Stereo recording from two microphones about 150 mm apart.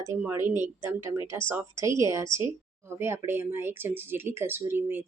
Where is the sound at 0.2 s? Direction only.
15° right (ahead or behind).